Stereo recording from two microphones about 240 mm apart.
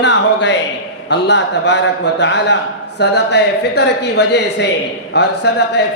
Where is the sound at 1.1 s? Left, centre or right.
Left.